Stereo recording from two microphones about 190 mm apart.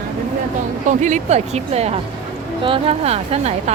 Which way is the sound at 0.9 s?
40° right (ahead or behind).